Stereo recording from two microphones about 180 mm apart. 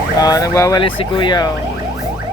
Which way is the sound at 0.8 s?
30° left (ahead or behind).